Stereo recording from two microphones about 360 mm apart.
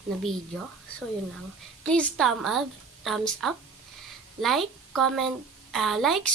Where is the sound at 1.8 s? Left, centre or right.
Centre.